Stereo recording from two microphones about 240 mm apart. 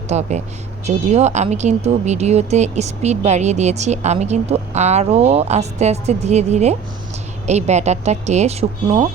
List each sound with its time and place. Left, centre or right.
0.1 s speech: right